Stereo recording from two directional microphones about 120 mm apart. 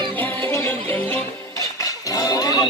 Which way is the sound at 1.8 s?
30° left (ahead or behind).